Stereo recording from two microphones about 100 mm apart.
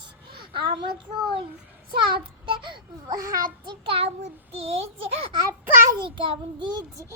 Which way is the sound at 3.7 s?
65° right (ahead or behind).